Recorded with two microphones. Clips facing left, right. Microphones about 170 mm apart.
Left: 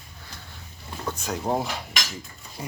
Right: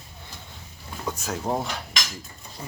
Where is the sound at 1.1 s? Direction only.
5° right (ahead or behind).